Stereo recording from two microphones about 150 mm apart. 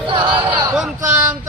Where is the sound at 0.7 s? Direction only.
5° right (ahead or behind).